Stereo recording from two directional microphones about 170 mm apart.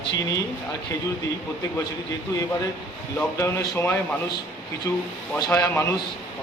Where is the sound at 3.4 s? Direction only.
15° left (ahead or behind).